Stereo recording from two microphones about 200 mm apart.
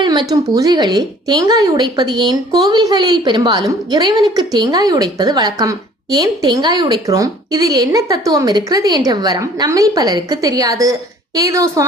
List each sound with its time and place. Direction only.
0.0 s a woman's voice: 20° right (ahead or behind)